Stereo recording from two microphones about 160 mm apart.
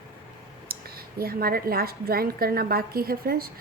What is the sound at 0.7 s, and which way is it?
A woman's voice, 70° right (ahead or behind).